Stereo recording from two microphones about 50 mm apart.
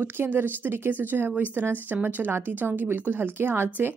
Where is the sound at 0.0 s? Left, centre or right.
Right.